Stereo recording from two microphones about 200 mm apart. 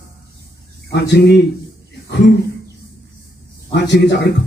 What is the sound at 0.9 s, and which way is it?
Speech, 55° left (ahead or behind).